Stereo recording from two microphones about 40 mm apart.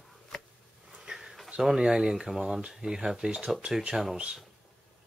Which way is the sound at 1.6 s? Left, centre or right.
Centre.